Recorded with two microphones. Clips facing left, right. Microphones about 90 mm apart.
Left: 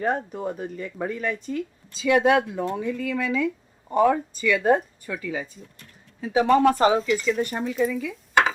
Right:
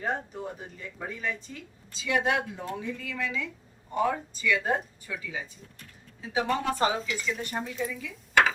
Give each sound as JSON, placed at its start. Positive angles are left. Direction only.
{"t": 0.0, "sound": "speech", "side_deg": 55}